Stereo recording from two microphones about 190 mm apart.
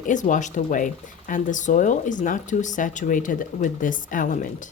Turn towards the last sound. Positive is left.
turn(degrees=45)  # may be behind; listen again after turning